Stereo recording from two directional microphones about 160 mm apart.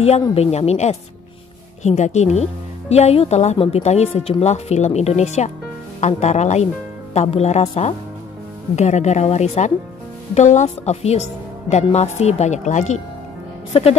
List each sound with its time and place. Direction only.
0.3 s speech: 40° left (ahead or behind)